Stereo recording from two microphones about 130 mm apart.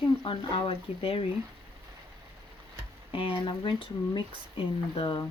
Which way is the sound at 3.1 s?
40° left (ahead or behind).